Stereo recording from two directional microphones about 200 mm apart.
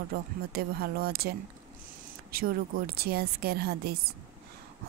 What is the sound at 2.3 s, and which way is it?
Speech, 50° right (ahead or behind).